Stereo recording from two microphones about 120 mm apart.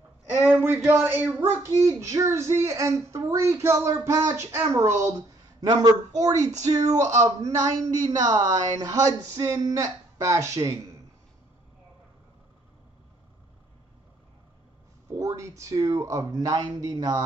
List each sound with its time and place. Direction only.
0.5 s a sound: 20° right (ahead or behind)
0.8 s speech: 20° right (ahead or behind)
6.5 s speech: 70° right (ahead or behind)
7.2 s speech: 25° right (ahead or behind)
15.1 s speech: 25° right (ahead or behind)